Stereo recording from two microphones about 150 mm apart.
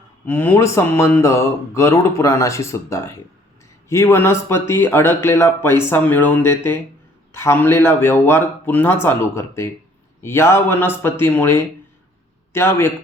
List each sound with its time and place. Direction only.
0.3 s speech: 15° left (ahead or behind)